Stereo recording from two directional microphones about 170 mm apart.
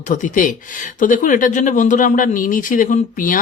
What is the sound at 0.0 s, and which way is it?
Speech, 50° left (ahead or behind).